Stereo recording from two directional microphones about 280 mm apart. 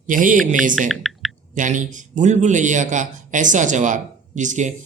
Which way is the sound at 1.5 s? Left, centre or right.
Right.